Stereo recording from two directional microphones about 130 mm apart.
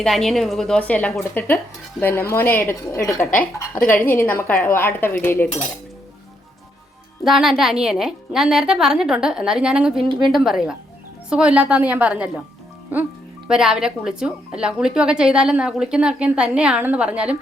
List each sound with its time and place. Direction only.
0.0 s speech: centre (ahead or behind)
1.3 s cutlery: 15° left (ahead or behind)
7.3 s a woman's voice: centre (ahead or behind)